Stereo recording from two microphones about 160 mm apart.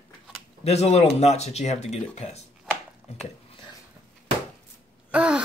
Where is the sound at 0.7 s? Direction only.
40° left (ahead or behind).